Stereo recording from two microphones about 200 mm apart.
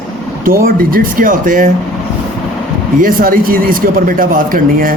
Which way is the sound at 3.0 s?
45° right (ahead or behind).